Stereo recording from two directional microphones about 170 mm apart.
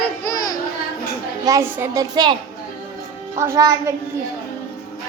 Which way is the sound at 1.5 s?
20° right (ahead or behind).